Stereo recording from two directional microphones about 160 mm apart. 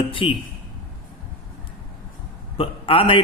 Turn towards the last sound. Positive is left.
turn(degrees=35)  # may be behind; listen again after turning